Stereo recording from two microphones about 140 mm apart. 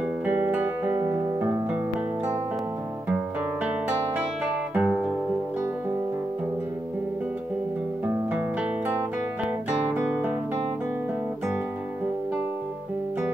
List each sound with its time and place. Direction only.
0.2 s music: 10° right (ahead or behind)
0.9 s music: 25° right (ahead or behind)
4.7 s guitar: 10° right (ahead or behind)
8.3 s music: 10° right (ahead or behind)
9.7 s guitar: 10° right (ahead or behind)